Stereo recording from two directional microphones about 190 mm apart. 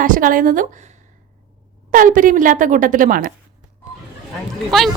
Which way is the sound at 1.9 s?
45° right (ahead or behind).